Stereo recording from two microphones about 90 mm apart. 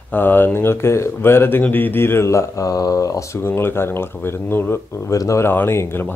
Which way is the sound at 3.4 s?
25° left (ahead or behind).